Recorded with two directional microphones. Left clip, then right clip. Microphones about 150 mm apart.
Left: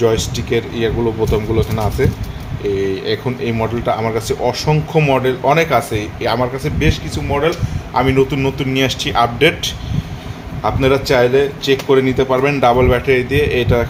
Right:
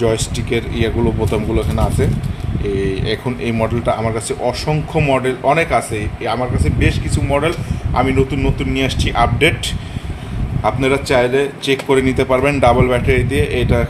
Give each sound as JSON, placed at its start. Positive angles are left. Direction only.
{"t": 0.0, "sound": "a man's voice", "side_deg": -5}
{"t": 5.9, "sound": "speech", "side_deg": 20}
{"t": 6.8, "sound": "a man's voice", "side_deg": 0}
{"t": 7.3, "sound": "speech", "side_deg": -25}
{"t": 7.9, "sound": "speech", "side_deg": 10}
{"t": 10.6, "sound": "a man's voice", "side_deg": 0}